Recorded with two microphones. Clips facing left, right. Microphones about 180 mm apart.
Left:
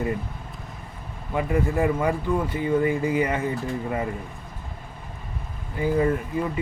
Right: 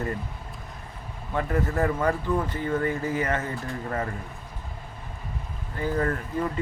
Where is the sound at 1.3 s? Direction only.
10° left (ahead or behind).